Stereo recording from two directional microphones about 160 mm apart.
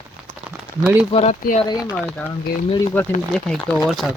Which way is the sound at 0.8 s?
5° right (ahead or behind).